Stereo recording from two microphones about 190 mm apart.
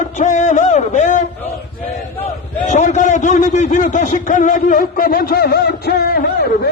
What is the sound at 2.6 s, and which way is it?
A man's voice, 40° left (ahead or behind).